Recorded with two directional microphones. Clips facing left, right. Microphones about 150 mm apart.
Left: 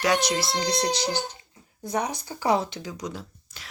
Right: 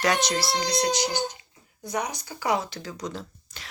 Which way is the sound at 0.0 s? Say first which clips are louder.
Left 1 dB; 10° left (ahead or behind).